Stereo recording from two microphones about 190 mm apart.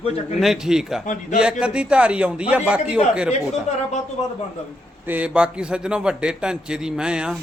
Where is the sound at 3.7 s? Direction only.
35° left (ahead or behind).